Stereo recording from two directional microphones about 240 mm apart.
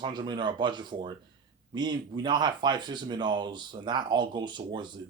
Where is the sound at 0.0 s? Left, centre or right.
Centre.